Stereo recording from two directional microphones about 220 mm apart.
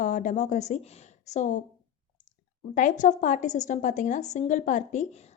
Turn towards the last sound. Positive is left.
turn(degrees=35)  # may be behind; listen again after turning